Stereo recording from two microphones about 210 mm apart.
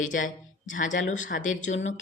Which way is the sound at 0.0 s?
40° left (ahead or behind).